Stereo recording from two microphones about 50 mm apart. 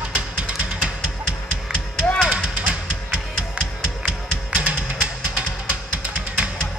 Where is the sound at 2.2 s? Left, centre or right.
Right.